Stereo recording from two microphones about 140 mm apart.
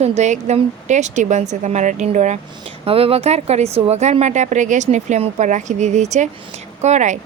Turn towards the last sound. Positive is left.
turn(degrees=-55)  # may be behind; listen again after turning